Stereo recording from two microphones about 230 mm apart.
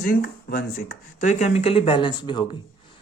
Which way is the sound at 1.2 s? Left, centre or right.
Left.